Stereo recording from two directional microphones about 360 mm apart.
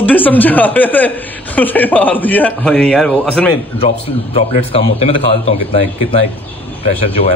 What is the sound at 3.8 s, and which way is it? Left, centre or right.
Speech, centre.